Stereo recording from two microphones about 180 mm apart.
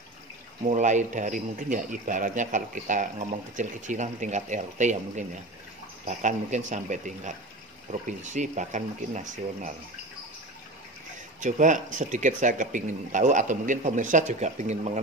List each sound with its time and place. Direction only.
0.7 s speech: 40° right (ahead or behind)
11.4 s speech: 45° right (ahead or behind)